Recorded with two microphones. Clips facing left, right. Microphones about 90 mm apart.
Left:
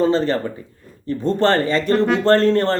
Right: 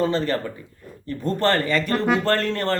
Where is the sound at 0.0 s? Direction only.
30° left (ahead or behind).